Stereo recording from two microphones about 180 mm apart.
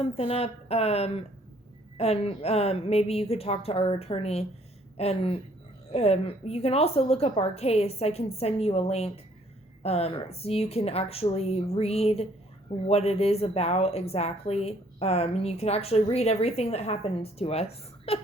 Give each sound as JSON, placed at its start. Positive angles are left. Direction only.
{"t": 0.0, "sound": "a woman's voice", "side_deg": 35}